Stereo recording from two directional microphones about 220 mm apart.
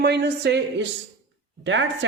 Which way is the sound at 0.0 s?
50° right (ahead or behind).